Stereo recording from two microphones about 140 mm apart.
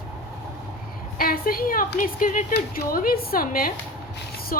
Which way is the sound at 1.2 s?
90° left.